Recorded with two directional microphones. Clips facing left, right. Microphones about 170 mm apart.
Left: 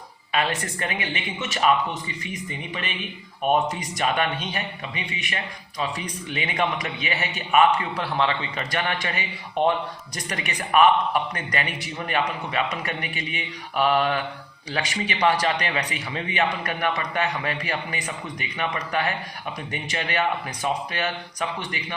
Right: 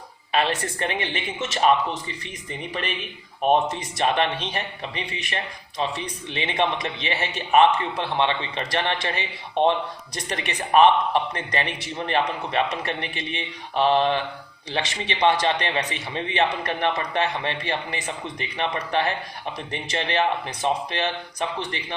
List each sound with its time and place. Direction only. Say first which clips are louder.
0.3 s speech: right 2 dB; 30° right (ahead or behind)
3.4 s a man's voice: right 2 dB; 30° right (ahead or behind)